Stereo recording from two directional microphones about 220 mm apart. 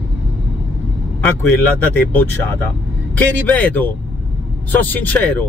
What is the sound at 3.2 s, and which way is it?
Speech, 5° left (ahead or behind).